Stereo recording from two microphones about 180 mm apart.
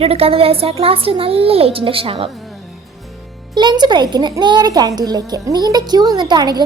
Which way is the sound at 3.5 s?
25° right (ahead or behind).